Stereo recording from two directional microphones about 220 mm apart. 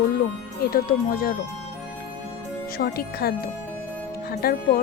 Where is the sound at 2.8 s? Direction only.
45° left (ahead or behind).